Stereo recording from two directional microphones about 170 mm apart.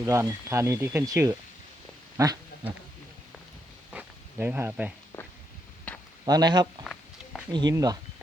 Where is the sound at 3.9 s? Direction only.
10° right (ahead or behind).